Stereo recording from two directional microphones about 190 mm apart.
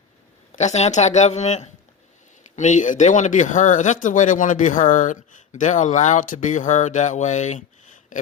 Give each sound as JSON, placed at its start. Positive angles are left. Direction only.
{"t": 0.5, "sound": "speech", "side_deg": 35}